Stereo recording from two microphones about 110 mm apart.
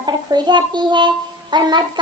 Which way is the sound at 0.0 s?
40° right (ahead or behind).